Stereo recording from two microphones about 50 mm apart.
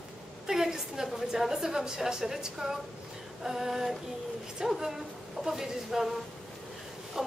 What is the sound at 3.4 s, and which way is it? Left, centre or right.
Speech, centre.